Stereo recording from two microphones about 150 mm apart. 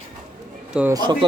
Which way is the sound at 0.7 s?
10° right (ahead or behind).